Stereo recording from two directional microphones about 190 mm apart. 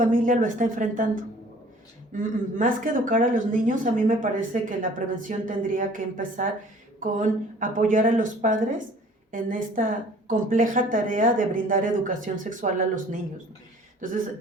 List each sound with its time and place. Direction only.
0.0 s speech: 45° right (ahead or behind)